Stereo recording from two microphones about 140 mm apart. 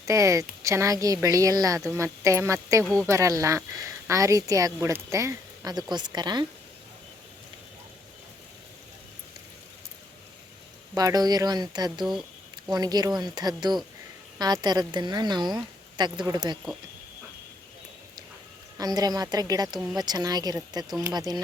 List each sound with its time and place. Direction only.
0.0 s speech: 20° right (ahead or behind)
10.9 s a woman's voice: 25° right (ahead or behind)
18.8 s speech: 30° right (ahead or behind)